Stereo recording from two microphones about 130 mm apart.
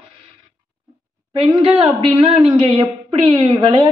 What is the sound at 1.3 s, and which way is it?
A man's voice, 40° right (ahead or behind).